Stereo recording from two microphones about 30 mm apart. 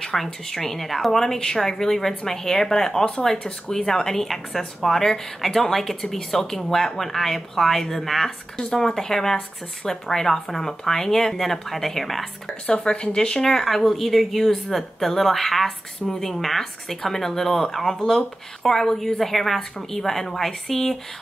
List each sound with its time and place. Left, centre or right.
0.0 s a woman's voice: centre
12.9 s speech: left
13.4 s a woman's voice: centre